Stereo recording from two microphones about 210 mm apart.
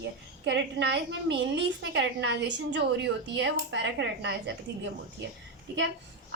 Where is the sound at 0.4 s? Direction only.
55° right (ahead or behind).